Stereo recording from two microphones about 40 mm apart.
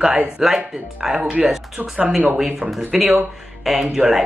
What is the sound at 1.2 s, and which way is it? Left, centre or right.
Speech, right.